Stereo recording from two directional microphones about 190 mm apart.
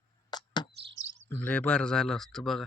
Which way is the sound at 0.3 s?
20° left (ahead or behind).